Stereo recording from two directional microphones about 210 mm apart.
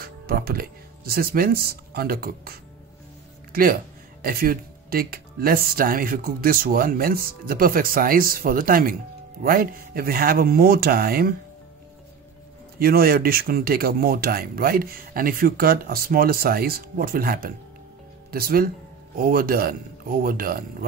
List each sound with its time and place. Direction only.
0.0 s speech: 45° right (ahead or behind)
4.2 s speech: 45° right (ahead or behind)
12.7 s speech: 45° right (ahead or behind)